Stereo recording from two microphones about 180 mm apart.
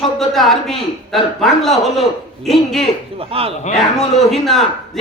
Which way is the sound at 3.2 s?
30° right (ahead or behind).